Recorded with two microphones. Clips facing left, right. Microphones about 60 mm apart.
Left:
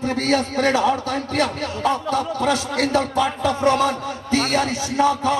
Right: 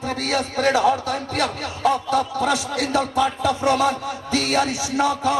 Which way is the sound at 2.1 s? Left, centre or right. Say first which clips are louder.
Even; left.